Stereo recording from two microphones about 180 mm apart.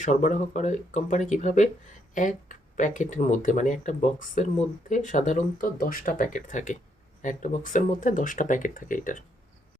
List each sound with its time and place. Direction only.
0.0 s speech: 40° left (ahead or behind)
2.7 s speech: 45° left (ahead or behind)